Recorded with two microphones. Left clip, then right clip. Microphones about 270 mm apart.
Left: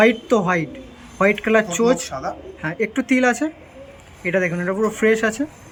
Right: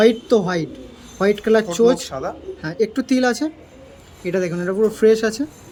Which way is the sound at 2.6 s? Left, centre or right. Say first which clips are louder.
Right 2 dB; centre.